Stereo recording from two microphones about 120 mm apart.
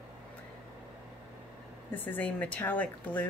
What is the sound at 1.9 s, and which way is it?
Speech, 15° left (ahead or behind).